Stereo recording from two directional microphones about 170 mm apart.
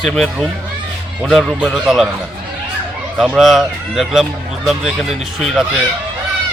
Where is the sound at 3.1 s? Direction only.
Centre (ahead or behind).